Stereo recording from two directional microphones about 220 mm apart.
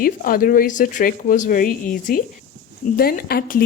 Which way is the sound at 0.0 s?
40° left (ahead or behind).